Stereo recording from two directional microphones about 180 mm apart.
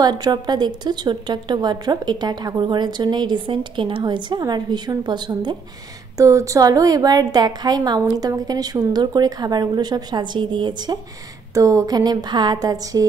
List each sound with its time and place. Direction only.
0.0 s a woman's voice: 20° right (ahead or behind)